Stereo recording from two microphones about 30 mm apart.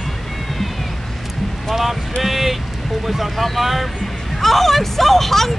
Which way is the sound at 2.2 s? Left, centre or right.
Centre.